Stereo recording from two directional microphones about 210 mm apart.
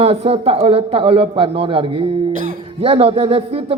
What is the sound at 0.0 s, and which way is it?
Speech, 30° right (ahead or behind).